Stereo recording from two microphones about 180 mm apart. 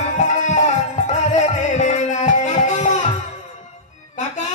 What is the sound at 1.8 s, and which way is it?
Music, 40° left (ahead or behind).